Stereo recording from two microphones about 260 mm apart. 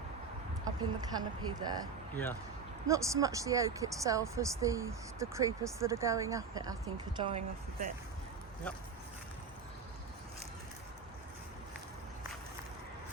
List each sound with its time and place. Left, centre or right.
0.6 s speech: centre
2.8 s a woman's voice: centre
8.7 s speech: centre